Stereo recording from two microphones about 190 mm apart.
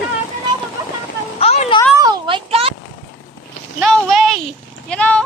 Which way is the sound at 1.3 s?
35° left (ahead or behind).